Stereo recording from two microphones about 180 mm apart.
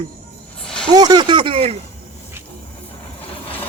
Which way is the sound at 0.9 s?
20° right (ahead or behind).